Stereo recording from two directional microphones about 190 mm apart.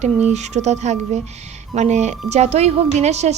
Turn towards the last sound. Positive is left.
turn(degrees=-35)  # may be behind; listen again after turning